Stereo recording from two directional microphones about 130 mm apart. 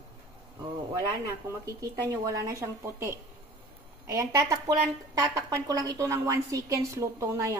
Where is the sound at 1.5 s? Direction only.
25° right (ahead or behind).